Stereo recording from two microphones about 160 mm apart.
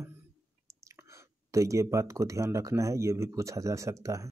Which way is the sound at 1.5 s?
20° right (ahead or behind).